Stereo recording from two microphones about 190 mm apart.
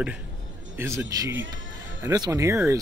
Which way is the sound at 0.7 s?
15° right (ahead or behind).